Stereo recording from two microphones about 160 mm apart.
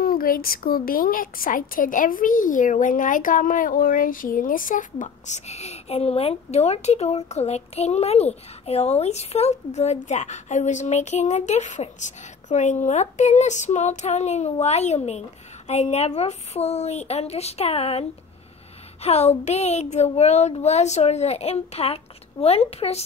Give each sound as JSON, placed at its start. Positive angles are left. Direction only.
{"t": 0.0, "sound": "a woman's voice", "side_deg": 65}
{"t": 19.0, "sound": "speech", "side_deg": 45}